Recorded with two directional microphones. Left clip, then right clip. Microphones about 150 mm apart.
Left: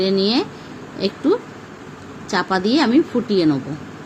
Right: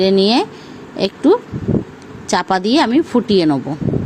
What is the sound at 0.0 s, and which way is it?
Speech, 55° right (ahead or behind).